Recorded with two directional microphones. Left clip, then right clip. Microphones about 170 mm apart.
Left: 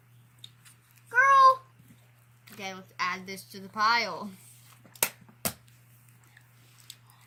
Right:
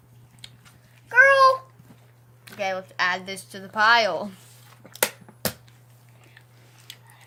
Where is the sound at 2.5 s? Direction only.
45° right (ahead or behind).